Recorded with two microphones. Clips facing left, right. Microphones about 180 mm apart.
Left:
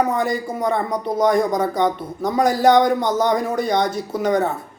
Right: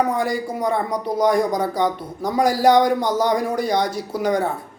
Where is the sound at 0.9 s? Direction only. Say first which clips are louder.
Left 1 dB; 25° left (ahead or behind).